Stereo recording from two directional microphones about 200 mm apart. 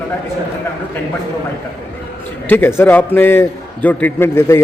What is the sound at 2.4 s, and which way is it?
A man's voice, 10° left (ahead or behind).